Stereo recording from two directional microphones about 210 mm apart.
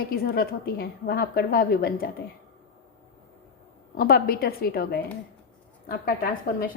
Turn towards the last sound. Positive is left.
turn(degrees=45)  # may be behind; listen again after turning